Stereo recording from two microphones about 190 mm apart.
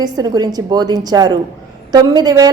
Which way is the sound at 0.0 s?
20° right (ahead or behind).